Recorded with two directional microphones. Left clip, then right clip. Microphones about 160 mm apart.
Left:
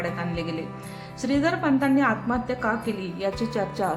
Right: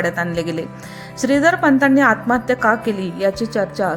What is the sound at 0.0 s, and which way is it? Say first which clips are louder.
A woman's voice: right 9 dB; 50° right (ahead or behind).